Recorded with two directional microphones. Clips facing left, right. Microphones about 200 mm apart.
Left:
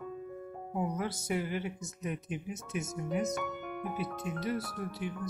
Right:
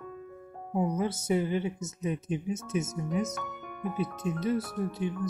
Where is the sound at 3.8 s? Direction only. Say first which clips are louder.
Right 7 dB; centre (ahead or behind).